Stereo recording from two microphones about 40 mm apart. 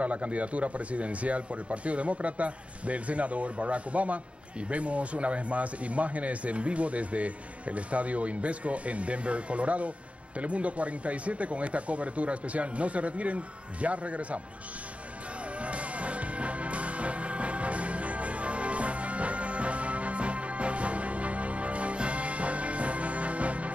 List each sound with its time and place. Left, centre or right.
0.0 s speech: right
15.6 s music: right